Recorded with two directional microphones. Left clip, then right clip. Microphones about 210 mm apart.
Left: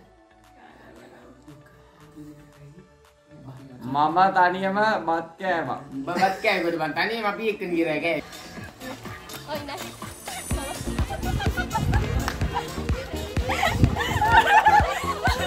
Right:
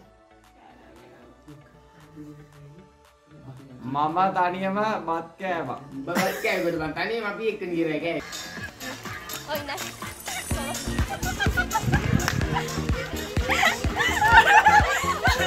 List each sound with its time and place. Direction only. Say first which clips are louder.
3.9 s a man's voice: left 4 dB; 10° right (ahead or behind)
6.4 s speech: left 2 dB; 50° left (ahead or behind)
8.2 s music: right 2 dB; 5° left (ahead or behind)
9.5 s music: right 2 dB; 10° right (ahead or behind)
9.8 s music: right 2 dB; 5° left (ahead or behind)
14.3 s snicker: right 1 dB; 5° right (ahead or behind)